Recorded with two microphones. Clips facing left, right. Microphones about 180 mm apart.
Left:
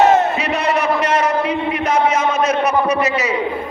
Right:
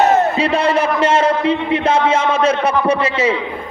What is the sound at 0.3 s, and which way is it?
A man's voice, 30° right (ahead or behind).